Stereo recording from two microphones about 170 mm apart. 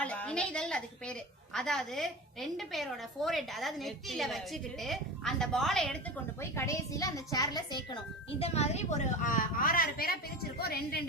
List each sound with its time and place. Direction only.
0.0 s a woman's voice: 5° left (ahead or behind)
6.4 s a woman's voice: 15° left (ahead or behind)
8.4 s a woman's voice: 40° left (ahead or behind); by 11.0 s 65° left (ahead or behind)